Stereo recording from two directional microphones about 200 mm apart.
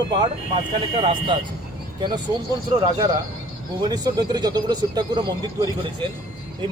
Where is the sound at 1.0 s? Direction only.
25° right (ahead or behind).